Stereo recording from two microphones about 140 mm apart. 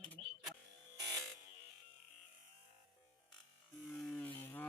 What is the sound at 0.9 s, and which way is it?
Music, 25° right (ahead or behind).